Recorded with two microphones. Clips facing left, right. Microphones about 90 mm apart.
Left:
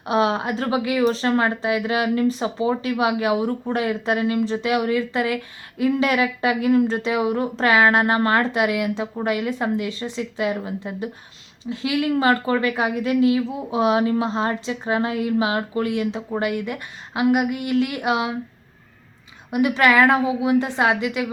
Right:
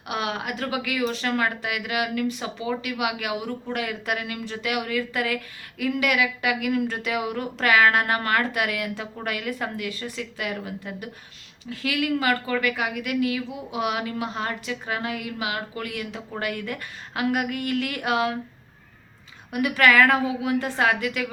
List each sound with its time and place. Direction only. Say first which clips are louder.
0.0 s speech: left 8 dB; 30° left (ahead or behind)
19.5 s speech: left 3 dB; 20° left (ahead or behind)